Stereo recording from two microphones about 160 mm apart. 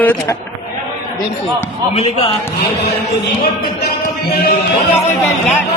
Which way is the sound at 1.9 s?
40° left (ahead or behind).